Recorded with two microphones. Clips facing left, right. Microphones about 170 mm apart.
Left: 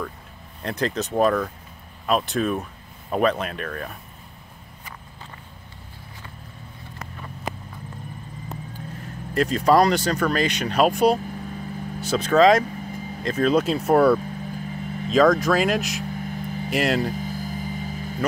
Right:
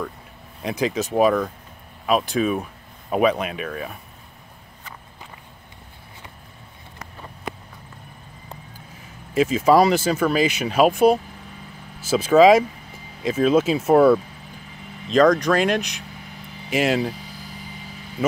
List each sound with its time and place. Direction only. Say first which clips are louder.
0.6 s speech: right 2 dB; 5° right (ahead or behind)
9.0 s speech: right 3 dB; 5° right (ahead or behind)
16.2 s a sound: left 10 dB; 45° left (ahead or behind)
16.7 s speech: right 2 dB; centre (ahead or behind)
17.1 s vehicle: left 9 dB; 45° left (ahead or behind)